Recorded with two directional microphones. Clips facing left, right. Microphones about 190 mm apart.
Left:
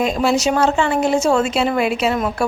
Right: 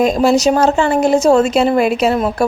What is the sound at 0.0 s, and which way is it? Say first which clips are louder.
Speech: right 5 dB; 40° right (ahead or behind).